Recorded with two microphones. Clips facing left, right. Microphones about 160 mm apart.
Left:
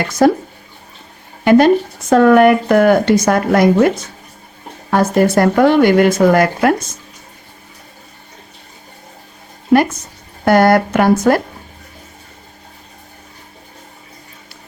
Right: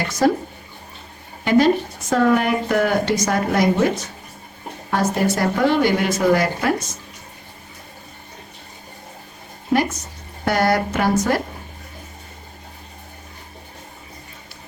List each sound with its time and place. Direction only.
0.2 s speech: 65° left (ahead or behind)
1.5 s speech: 60° left (ahead or behind)
10.4 s speech: 55° left (ahead or behind)